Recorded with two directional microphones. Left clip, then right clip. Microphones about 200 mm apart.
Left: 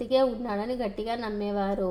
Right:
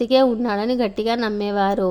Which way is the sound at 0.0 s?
35° right (ahead or behind).